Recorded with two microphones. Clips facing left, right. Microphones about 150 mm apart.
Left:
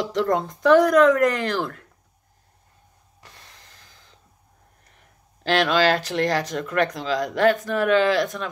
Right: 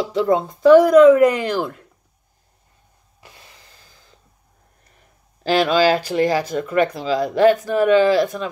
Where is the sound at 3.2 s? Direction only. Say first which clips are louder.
Right 3 dB; 10° right (ahead or behind).